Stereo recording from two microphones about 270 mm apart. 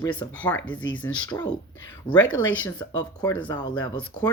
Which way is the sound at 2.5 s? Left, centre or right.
Centre.